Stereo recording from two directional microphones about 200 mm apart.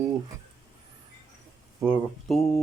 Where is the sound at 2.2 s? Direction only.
Centre (ahead or behind).